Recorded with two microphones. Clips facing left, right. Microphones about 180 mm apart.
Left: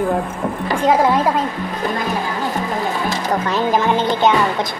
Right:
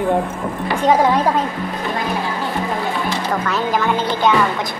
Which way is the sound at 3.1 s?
40° left (ahead or behind).